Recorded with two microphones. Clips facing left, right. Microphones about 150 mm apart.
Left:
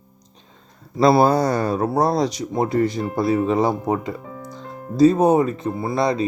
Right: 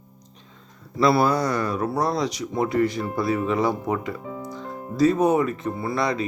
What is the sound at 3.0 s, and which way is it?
Speech, 30° left (ahead or behind).